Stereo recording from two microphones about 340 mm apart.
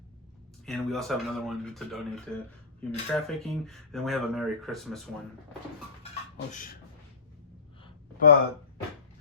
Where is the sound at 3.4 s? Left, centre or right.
Centre.